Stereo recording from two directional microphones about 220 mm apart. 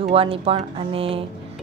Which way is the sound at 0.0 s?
25° right (ahead or behind).